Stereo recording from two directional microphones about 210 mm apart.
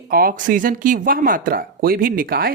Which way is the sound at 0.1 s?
45° right (ahead or behind).